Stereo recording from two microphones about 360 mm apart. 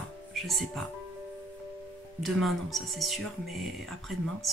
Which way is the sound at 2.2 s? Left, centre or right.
Centre.